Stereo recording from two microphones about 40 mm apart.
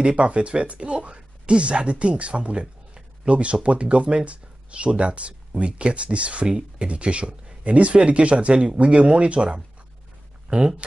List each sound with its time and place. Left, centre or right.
0.0 s speech: right